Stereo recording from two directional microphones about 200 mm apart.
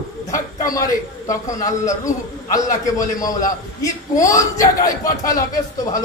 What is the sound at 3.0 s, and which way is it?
A man's voice, 15° left (ahead or behind).